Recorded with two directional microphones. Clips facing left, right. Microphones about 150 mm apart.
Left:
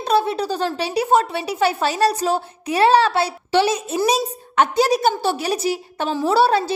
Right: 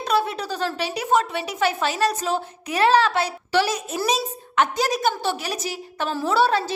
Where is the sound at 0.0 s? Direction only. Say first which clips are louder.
Left 4 dB; 30° left (ahead or behind).